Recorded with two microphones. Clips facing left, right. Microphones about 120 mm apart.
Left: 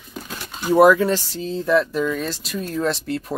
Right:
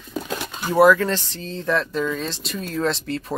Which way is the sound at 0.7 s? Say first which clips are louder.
Left 2 dB; 15° left (ahead or behind).